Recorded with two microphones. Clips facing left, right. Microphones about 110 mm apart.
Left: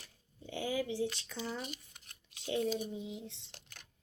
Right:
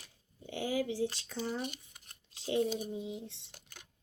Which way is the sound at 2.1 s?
30° right (ahead or behind).